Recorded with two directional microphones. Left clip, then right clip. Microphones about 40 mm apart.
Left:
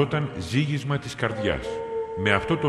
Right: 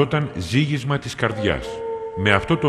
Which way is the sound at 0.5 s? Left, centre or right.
Right.